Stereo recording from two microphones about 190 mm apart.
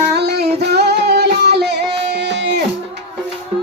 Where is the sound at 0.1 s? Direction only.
60° right (ahead or behind).